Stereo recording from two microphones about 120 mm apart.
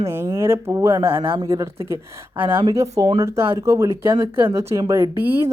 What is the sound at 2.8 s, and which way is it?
Speech, 30° right (ahead or behind).